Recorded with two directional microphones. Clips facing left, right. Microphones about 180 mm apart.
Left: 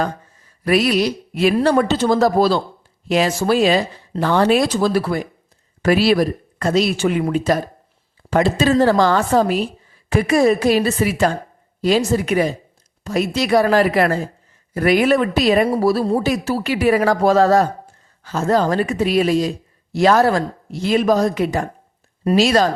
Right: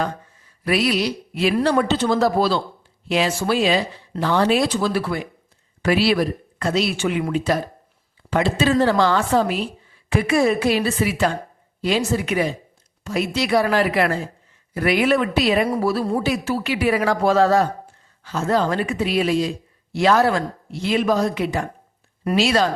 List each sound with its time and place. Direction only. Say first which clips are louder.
0.6 s speech: left 4 dB; 45° left (ahead or behind)